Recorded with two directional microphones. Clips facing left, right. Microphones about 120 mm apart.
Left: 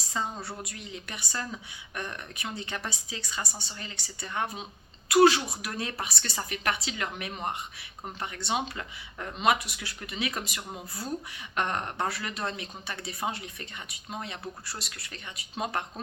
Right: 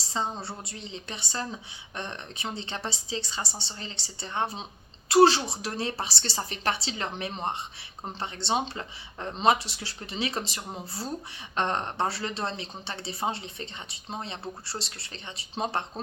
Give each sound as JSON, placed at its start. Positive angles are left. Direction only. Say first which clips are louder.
{"t": 0.1, "sound": "speech", "louder": "right 2 dB", "side_deg": -25}